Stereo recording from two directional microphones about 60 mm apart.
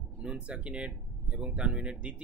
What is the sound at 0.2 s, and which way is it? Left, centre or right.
Speech, centre.